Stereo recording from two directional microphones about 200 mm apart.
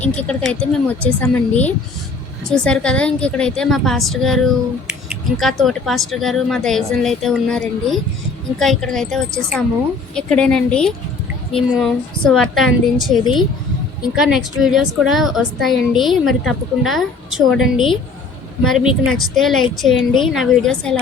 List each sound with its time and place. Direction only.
0.0 s a woman's voice: 5° left (ahead or behind)
14.2 s a woman's voice: 5° right (ahead or behind)